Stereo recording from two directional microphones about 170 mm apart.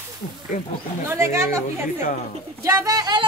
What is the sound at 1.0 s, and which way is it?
A woman's voice, 15° right (ahead or behind).